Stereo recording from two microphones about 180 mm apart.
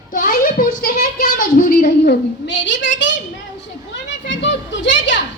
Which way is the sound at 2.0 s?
85° left.